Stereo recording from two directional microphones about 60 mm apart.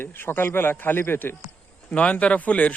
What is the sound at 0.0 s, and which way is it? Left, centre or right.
A man's voice, left.